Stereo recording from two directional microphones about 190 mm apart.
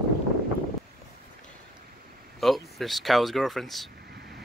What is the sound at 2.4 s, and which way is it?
Speech, centre (ahead or behind).